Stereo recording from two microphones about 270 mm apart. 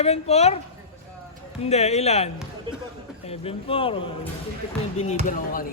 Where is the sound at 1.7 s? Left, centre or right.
Left.